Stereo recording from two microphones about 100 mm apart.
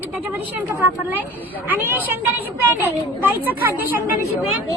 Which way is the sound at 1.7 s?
20° right (ahead or behind).